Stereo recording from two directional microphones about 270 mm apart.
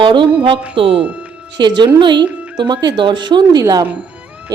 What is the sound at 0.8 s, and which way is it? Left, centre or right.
Speech, centre.